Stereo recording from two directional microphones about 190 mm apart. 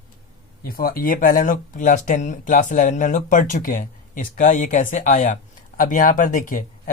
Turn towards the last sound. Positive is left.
turn(degrees=45)  # may be behind; listen again after turning